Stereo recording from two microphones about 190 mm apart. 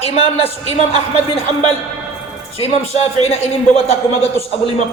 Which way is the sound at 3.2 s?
35° left (ahead or behind).